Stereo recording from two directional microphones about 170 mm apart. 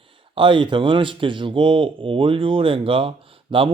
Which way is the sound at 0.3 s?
30° right (ahead or behind).